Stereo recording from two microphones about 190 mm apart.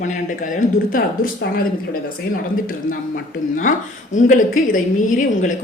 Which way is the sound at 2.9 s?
45° left (ahead or behind).